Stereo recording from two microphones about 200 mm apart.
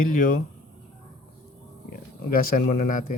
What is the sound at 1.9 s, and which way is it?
Speech, 45° left (ahead or behind).